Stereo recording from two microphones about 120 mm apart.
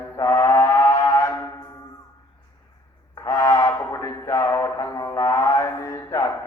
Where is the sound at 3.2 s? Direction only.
25° left (ahead or behind).